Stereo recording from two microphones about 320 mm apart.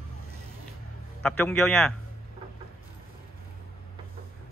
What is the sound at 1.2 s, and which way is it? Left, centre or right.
Speech, centre.